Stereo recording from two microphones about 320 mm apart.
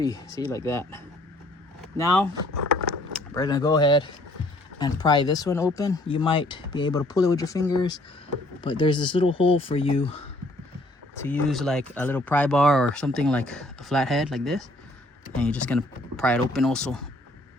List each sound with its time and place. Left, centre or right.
0.0 s speech: centre
3.3 s speech: centre
11.2 s speech: centre